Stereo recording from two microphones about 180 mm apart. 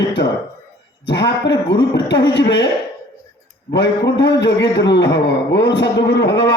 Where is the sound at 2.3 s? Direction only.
80° left.